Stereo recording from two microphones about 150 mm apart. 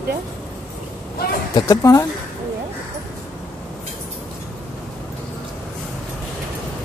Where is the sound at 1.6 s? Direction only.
20° left (ahead or behind).